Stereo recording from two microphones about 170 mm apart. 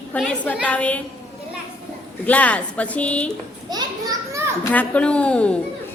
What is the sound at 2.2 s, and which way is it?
A woman's voice, 10° left (ahead or behind).